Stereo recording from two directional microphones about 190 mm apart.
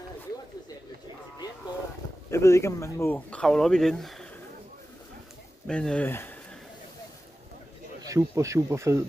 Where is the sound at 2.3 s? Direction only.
15° left (ahead or behind).